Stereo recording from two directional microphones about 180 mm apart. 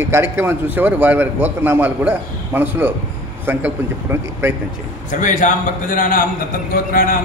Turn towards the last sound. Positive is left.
turn(degrees=55)  # may be behind; listen again after turning